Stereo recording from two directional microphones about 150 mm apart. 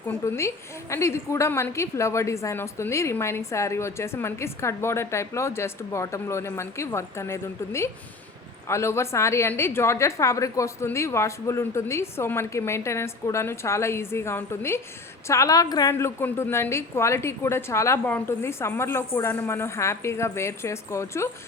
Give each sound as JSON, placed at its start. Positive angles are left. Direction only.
{"t": 0.1, "sound": "a woman's voice", "side_deg": 20}